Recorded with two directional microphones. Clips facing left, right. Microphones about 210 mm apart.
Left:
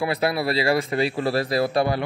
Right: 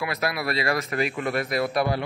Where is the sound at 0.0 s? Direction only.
30° left (ahead or behind).